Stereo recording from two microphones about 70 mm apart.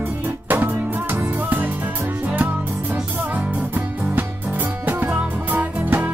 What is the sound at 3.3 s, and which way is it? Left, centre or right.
Music, right.